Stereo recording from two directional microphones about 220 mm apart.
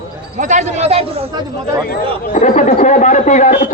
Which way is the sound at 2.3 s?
35° left (ahead or behind).